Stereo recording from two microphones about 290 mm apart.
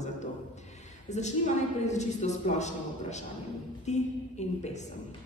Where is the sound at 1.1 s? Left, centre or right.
Left.